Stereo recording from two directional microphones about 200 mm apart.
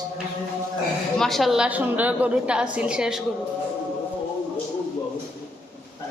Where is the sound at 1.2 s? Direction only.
Centre (ahead or behind).